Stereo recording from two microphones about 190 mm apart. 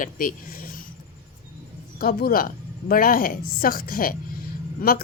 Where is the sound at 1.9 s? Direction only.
50° left (ahead or behind).